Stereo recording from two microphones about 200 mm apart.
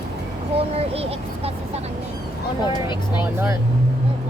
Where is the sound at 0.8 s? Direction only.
30° right (ahead or behind).